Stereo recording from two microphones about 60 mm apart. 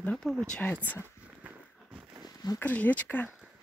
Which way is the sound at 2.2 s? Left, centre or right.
Left.